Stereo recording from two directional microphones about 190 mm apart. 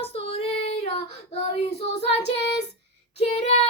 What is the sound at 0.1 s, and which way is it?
Female singing, 30° left (ahead or behind).